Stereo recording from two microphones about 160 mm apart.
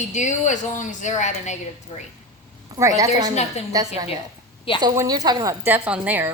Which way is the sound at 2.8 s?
20° right (ahead or behind).